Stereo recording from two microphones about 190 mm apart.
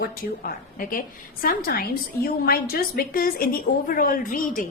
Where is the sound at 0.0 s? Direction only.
50° left (ahead or behind).